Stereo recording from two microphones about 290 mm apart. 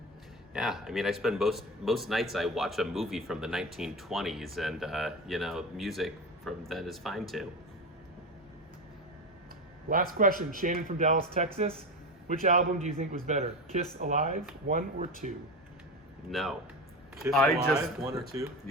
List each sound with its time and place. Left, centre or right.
0.5 s speech: centre
9.9 s speech: right
16.3 s speech: centre
17.7 s speech: centre